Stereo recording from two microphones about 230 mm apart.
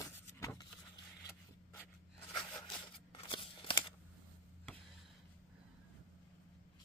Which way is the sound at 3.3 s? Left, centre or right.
Left.